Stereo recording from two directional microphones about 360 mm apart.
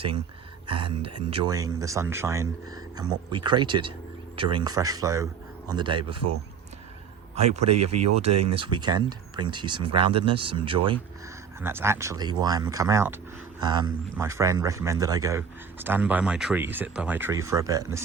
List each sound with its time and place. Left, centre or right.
0.7 s speech: centre
7.5 s speech: centre